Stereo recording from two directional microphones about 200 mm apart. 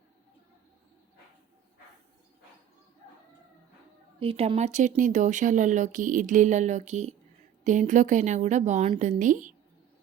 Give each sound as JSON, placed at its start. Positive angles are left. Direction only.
{"t": 4.2, "sound": "speech", "side_deg": -30}